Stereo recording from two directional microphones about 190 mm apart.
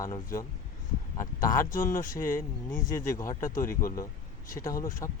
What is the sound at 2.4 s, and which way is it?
Speech, 45° left (ahead or behind).